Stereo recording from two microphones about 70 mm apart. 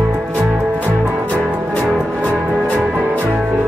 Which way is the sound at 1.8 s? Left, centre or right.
Centre.